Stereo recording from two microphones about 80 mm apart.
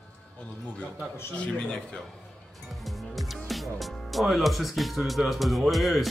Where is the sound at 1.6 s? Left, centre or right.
Centre.